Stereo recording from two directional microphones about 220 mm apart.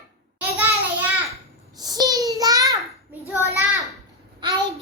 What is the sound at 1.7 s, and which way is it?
Child singing, 15° right (ahead or behind).